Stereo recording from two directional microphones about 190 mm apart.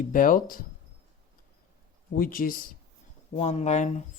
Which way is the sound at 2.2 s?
50° left (ahead or behind).